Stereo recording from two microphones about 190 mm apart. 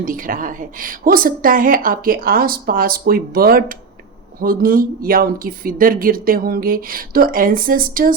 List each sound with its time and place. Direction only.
0.0 s a woman's voice: 45° right (ahead or behind)